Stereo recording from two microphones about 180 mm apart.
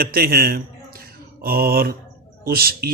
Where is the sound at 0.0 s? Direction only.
55° right (ahead or behind).